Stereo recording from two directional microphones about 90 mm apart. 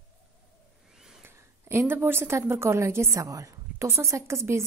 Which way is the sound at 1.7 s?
30° right (ahead or behind).